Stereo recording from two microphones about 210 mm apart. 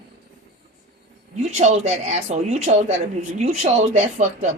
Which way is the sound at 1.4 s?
35° right (ahead or behind).